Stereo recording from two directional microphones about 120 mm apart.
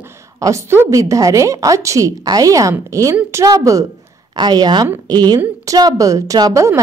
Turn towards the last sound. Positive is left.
turn(degrees=-25)  # may be behind; listen again after turning